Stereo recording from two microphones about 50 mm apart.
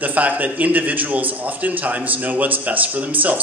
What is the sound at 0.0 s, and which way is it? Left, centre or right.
A man's voice, right.